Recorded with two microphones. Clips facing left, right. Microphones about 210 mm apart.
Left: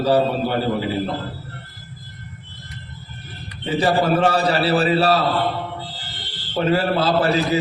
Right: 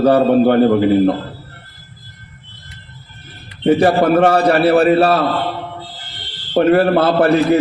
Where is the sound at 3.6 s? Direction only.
55° right (ahead or behind).